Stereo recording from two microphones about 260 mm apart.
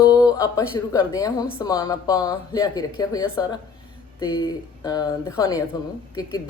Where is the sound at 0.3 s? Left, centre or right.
Centre.